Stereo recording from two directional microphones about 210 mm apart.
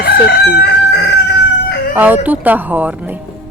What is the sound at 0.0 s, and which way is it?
Crowing, 50° left (ahead or behind).